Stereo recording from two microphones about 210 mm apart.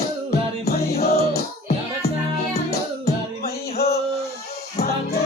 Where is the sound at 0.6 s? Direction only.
50° left (ahead or behind).